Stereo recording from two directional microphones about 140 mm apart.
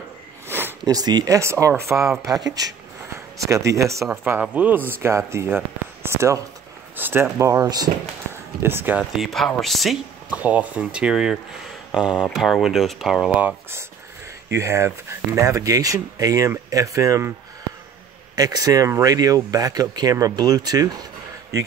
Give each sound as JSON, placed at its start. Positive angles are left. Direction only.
{"t": 0.5, "sound": "sniff", "side_deg": -15}
{"t": 0.8, "sound": "speech", "side_deg": -30}
{"t": 4.2, "sound": "speech", "side_deg": -10}
{"t": 8.6, "sound": "speech", "side_deg": -15}
{"t": 9.1, "sound": "speech", "side_deg": 0}
{"t": 10.4, "sound": "speech", "side_deg": -10}
{"t": 18.3, "sound": "speech", "side_deg": -25}